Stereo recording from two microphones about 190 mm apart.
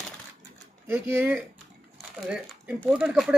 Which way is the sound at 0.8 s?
10° right (ahead or behind).